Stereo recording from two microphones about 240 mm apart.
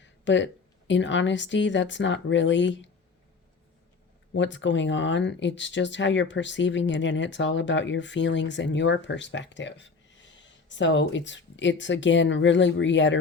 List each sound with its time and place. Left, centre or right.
0.0 s a woman's voice: left
4.4 s speech: left